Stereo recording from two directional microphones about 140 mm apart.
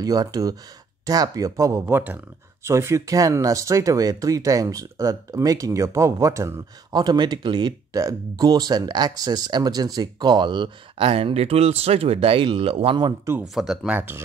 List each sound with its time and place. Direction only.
0.0 s speech: 25° right (ahead or behind); by 12.9 s 45° right (ahead or behind)
13.4 s speech: 5° right (ahead or behind)